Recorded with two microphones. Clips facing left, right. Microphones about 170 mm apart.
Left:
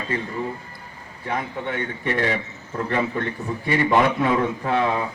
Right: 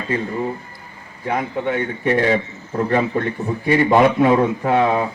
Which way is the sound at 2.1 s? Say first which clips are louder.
Right 6 dB; 25° right (ahead or behind).